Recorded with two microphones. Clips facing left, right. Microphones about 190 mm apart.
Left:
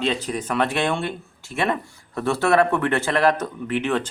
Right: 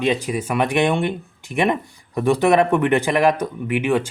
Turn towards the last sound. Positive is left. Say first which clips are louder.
# right 3 dB
turn(degrees=-10)  # may be behind; listen again after turning